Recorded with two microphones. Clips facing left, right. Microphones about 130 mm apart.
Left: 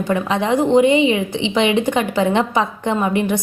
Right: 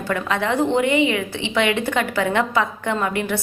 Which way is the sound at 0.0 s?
20° left (ahead or behind).